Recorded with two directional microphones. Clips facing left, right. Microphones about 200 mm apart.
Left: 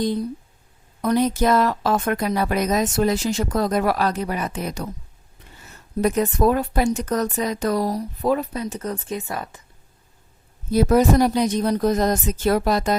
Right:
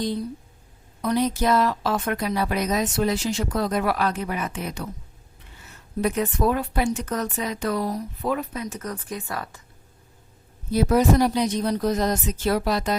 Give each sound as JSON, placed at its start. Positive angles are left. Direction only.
{"t": 1.0, "sound": "speech", "side_deg": 50}
{"t": 10.7, "sound": "speech", "side_deg": 45}